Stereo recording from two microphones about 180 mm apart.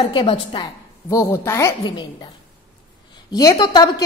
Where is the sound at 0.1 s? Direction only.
30° left (ahead or behind).